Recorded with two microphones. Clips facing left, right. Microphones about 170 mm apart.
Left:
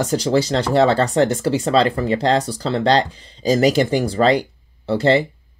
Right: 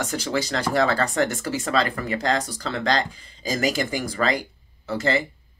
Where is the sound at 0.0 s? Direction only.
30° left (ahead or behind).